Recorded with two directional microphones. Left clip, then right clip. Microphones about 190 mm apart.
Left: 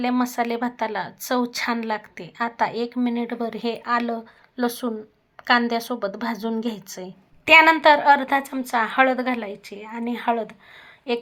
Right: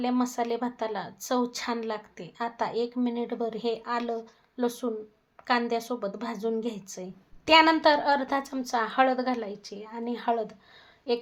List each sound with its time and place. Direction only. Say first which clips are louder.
0.0 s a woman's voice: left 5 dB; 15° left (ahead or behind)